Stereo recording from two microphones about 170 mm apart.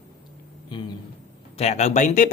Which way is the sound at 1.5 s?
40° left (ahead or behind).